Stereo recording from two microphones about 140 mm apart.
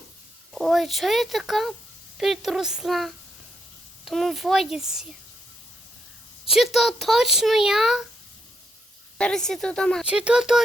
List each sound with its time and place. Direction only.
0.5 s a child's voice: centre (ahead or behind)
6.5 s a child's voice: centre (ahead or behind)
9.1 s a child's voice: 5° left (ahead or behind)
10.0 s speech: 5° right (ahead or behind)